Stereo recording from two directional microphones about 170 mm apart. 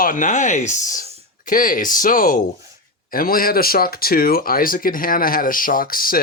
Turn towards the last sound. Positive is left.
turn(degrees=55)  # may be behind; listen again after turning